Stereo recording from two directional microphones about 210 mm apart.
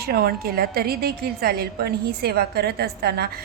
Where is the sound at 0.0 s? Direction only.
45° right (ahead or behind).